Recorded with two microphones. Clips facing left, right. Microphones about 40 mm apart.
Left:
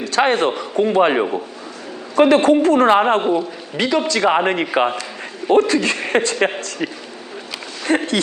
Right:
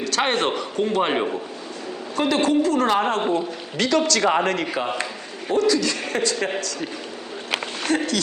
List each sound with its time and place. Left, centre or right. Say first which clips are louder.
0.0 s a sound: left 5 dB; left
0.5 s a man's voice: left 5 dB; left
1.1 s a man's voice: left 4 dB; left
2.1 s a man's voice: left 7 dB; left
3.2 s a man's voice: left 4 dB; centre
4.6 s a man's voice: left 6 dB; left